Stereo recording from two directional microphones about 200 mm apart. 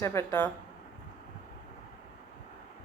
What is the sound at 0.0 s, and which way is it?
Speech, 15° left (ahead or behind).